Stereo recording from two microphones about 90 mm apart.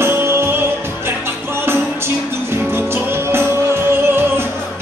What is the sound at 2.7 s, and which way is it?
Music, 25° right (ahead or behind).